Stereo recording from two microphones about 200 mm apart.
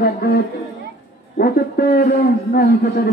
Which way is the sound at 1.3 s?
50° left (ahead or behind).